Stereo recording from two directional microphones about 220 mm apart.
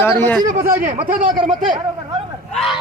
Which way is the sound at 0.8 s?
40° right (ahead or behind).